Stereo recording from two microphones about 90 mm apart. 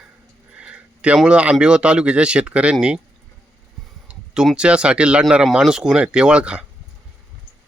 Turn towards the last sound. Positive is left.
turn(degrees=-10)  # may be behind; listen again after turning